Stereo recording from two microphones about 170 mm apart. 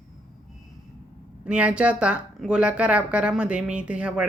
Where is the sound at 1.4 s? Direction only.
5° right (ahead or behind).